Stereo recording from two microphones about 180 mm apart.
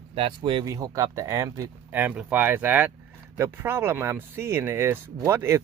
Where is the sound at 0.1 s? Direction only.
30° right (ahead or behind).